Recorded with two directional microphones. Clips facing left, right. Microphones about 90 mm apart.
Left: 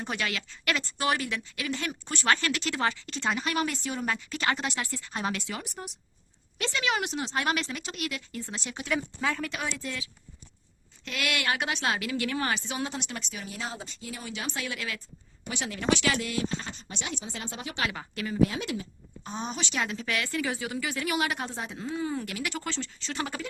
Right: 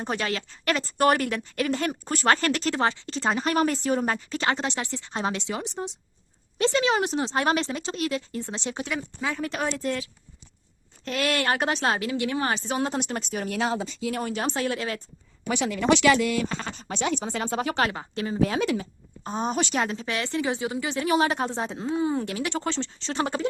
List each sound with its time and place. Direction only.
0.0 s speech: 35° right (ahead or behind)
0.9 s speech: 50° right (ahead or behind)
13.5 s speech: 85° right
14.2 s speech: 45° right (ahead or behind)
16.0 s speech: 70° right (ahead or behind); by 17.9 s 45° right (ahead or behind)
17.9 s speech: 30° right (ahead or behind)
18.3 s speech: 75° right (ahead or behind)
19.2 s a woman's voice: 40° right (ahead or behind)